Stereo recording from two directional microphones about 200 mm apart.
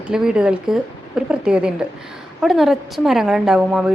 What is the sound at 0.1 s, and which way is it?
A woman's voice, 5° right (ahead or behind).